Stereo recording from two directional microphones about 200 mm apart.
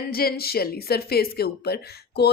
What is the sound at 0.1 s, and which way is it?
A woman's voice, 50° left (ahead or behind).